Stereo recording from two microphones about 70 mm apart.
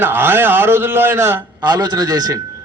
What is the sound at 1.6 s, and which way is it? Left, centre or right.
Speech, right.